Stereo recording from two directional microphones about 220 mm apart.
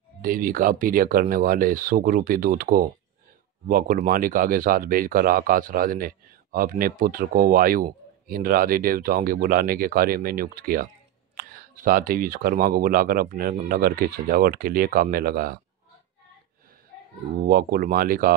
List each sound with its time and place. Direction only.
0.2 s speech: 40° right (ahead or behind)
17.4 s speech: 45° right (ahead or behind)